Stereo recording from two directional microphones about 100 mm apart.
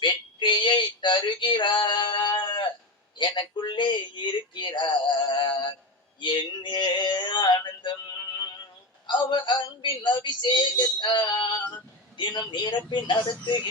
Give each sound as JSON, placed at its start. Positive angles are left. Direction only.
{"t": 0.0, "sound": "music", "side_deg": 50}
{"t": 3.2, "sound": "speech", "side_deg": 50}
{"t": 9.0, "sound": "speech", "side_deg": 50}